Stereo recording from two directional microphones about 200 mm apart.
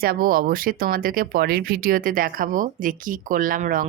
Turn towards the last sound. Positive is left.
turn(degrees=-45)  # may be behind; listen again after turning